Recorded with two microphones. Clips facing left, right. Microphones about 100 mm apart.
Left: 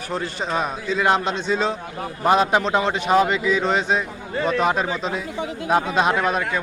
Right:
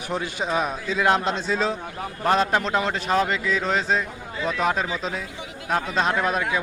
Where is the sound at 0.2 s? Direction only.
5° right (ahead or behind).